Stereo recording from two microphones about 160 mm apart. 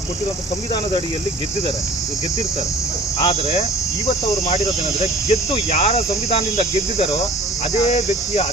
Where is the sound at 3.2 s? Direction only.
40° left (ahead or behind).